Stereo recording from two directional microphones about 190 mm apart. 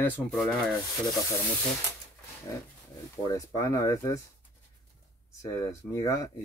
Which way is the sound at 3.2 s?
20° left (ahead or behind).